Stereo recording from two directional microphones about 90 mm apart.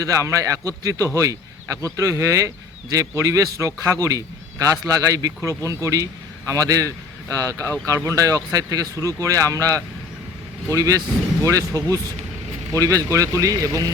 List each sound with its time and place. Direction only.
0.0 s a man's voice: 35° right (ahead or behind)